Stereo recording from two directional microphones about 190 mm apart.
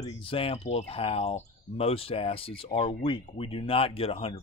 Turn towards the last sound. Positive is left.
turn(degrees=30)  # may be behind; listen again after turning